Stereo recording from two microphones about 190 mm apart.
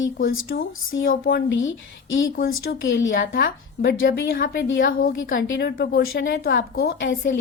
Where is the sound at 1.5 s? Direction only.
85° left.